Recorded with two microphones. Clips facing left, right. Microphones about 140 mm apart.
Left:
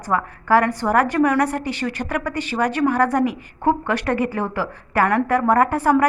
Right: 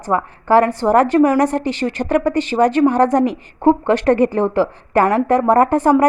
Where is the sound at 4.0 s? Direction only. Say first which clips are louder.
Right 8 dB; 35° right (ahead or behind).